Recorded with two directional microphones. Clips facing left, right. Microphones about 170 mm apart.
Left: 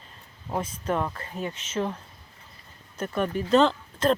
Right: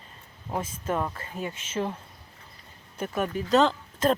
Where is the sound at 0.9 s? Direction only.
5° right (ahead or behind).